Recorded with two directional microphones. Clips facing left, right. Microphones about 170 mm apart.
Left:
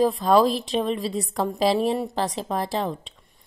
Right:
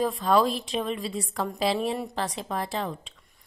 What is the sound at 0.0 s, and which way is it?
A woman's voice, 35° left (ahead or behind).